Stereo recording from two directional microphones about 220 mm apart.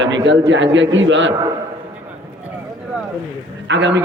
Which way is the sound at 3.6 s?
55° right (ahead or behind).